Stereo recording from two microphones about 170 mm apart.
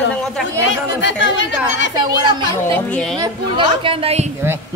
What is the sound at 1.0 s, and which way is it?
Speech, 90° left.